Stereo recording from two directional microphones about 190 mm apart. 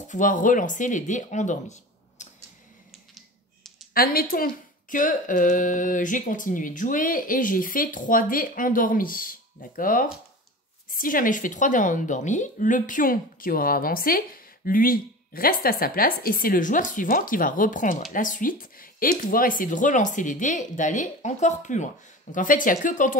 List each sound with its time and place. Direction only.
0.1 s speech: 45° left (ahead or behind)
3.9 s speech: 50° left (ahead or behind)